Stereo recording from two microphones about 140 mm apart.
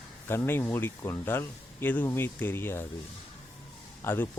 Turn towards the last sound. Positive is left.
turn(degrees=15)  # may be behind; listen again after turning